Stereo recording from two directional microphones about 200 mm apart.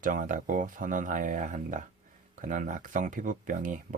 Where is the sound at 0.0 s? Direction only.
40° right (ahead or behind).